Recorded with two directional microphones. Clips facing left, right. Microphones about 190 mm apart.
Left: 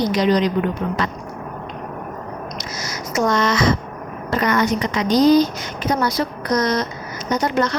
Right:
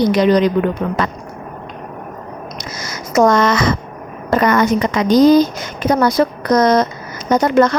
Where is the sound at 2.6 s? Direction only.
55° right (ahead or behind).